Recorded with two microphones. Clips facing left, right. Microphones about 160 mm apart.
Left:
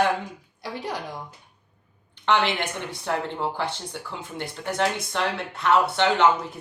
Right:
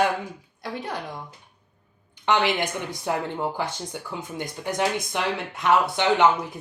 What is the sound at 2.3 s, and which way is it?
Speech, 15° right (ahead or behind).